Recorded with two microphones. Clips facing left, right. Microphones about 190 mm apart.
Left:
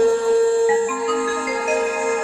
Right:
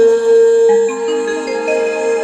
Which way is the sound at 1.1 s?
40° right (ahead or behind).